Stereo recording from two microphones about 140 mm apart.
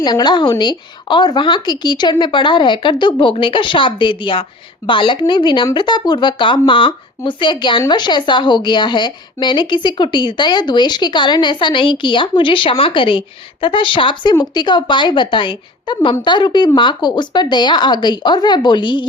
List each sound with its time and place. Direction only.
0.0 s speech: 30° left (ahead or behind)